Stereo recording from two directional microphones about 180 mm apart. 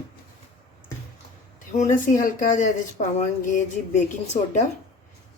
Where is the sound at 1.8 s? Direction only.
45° left (ahead or behind).